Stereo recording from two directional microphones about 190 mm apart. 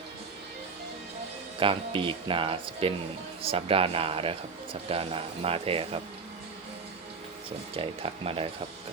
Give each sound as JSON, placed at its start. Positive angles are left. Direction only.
{"t": 1.5, "sound": "speech", "side_deg": -25}
{"t": 7.7, "sound": "speech", "side_deg": -30}